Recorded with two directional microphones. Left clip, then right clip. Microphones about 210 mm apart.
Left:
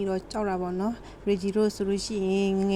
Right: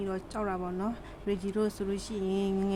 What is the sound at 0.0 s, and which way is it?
A woman's voice, 15° left (ahead or behind).